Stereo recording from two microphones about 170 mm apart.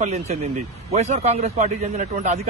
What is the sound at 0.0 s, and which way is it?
A man's voice, 40° right (ahead or behind).